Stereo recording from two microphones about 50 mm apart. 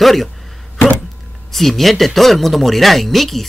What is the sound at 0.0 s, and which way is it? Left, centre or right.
Speech, centre.